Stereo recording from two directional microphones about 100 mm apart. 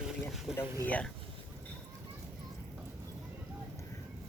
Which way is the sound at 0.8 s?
15° left (ahead or behind).